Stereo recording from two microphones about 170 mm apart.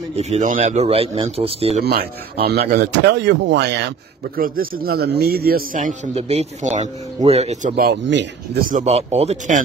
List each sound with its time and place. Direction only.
0.1 s a man's voice: 40° right (ahead or behind)
2.7 s speech: 75° right (ahead or behind)
4.4 s a man's voice: 60° right (ahead or behind)
6.1 s a man's voice: 35° right (ahead or behind)
7.7 s speech: 70° right (ahead or behind)
8.6 s a man's voice: 45° right (ahead or behind)